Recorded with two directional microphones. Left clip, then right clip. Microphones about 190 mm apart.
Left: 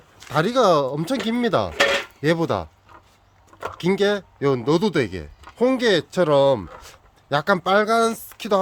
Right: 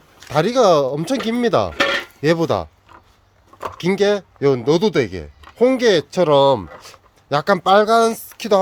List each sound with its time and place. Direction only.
0.2 s speech: 10° right (ahead or behind)
1.7 s cutlery: 50° left (ahead or behind)
2.2 s speech: 15° right (ahead or behind)